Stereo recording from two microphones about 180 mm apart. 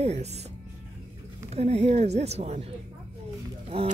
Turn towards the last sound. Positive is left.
turn(degrees=-35)  # may be behind; listen again after turning